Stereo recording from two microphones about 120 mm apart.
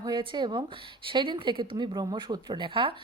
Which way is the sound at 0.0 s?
40° right (ahead or behind).